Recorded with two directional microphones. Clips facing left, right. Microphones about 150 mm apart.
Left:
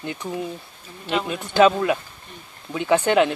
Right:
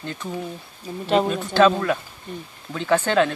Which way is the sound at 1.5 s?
15° left (ahead or behind).